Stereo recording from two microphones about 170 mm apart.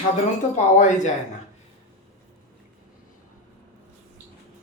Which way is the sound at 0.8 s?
45° left (ahead or behind).